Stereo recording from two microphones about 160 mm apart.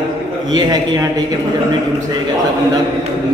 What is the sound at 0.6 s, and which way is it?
Speech, 25° right (ahead or behind).